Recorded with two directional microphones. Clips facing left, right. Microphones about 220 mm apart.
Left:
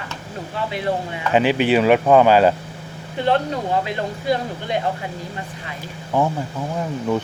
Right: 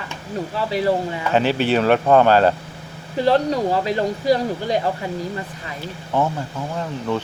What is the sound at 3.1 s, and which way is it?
Speech, 35° right (ahead or behind).